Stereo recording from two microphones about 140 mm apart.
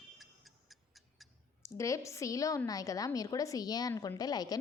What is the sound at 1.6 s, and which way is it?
A woman's voice, 20° left (ahead or behind).